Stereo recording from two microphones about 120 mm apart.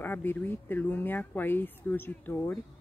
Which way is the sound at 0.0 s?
15° left (ahead or behind).